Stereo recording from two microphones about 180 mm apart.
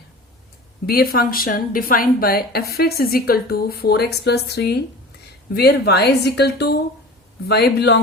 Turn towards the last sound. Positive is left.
turn(degrees=70)  # may be behind; listen again after turning